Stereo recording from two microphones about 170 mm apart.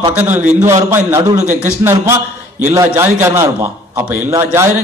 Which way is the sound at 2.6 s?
15° right (ahead or behind).